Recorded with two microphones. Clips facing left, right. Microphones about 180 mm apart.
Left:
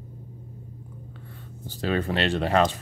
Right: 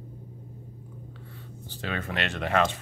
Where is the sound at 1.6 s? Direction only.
35° left (ahead or behind).